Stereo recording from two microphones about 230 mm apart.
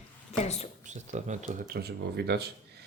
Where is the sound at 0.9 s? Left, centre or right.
Right.